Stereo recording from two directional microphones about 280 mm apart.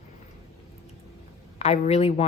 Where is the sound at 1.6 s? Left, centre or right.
Left.